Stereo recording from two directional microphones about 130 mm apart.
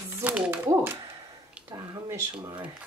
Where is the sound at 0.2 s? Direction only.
15° right (ahead or behind).